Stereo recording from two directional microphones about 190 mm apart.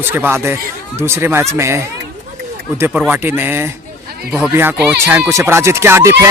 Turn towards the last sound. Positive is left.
turn(degrees=-15)  # may be behind; listen again after turning